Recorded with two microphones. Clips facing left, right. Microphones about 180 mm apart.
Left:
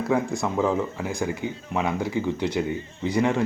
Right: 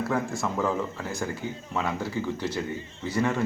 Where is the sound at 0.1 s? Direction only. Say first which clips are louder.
Left 4 dB; 15° left (ahead or behind).